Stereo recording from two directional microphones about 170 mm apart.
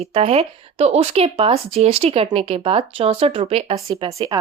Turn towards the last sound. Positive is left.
turn(degrees=-20)  # may be behind; listen again after turning